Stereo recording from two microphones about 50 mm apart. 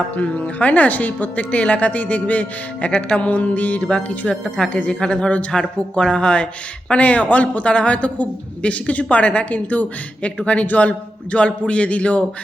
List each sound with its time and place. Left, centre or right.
0.2 s speech: left